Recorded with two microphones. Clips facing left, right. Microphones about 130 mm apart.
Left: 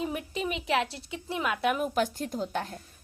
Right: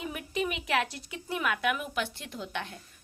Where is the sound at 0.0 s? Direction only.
30° left (ahead or behind).